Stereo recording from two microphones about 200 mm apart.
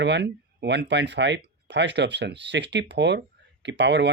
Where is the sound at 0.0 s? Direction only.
60° right (ahead or behind).